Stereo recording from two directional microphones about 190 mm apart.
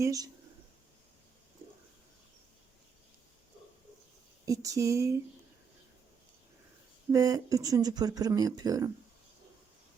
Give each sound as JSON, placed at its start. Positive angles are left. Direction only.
{"t": 0.0, "sound": "speech", "side_deg": -20}
{"t": 4.4, "sound": "speech", "side_deg": -15}
{"t": 7.1, "sound": "speech", "side_deg": -20}